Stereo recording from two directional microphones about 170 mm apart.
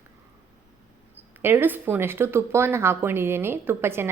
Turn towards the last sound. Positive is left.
turn(degrees=-15)  # may be behind; listen again after turning